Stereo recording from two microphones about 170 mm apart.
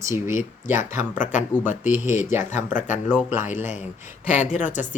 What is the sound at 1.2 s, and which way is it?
Speech, 50° left (ahead or behind).